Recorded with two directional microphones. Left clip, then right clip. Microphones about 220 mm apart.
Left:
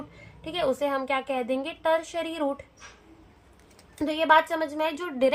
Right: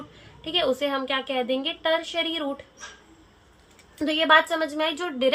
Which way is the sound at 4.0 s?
30° left (ahead or behind).